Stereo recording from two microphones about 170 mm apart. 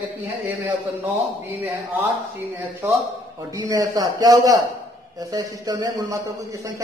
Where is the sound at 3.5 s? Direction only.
20° right (ahead or behind).